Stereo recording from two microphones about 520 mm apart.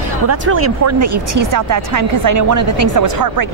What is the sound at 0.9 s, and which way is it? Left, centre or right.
A woman's voice, right.